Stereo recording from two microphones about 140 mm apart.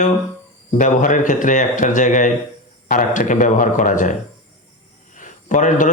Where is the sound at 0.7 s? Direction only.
65° left (ahead or behind).